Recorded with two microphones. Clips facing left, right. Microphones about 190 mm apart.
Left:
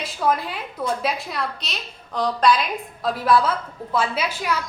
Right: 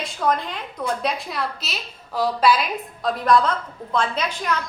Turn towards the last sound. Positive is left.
turn(degrees=5)  # may be behind; listen again after turning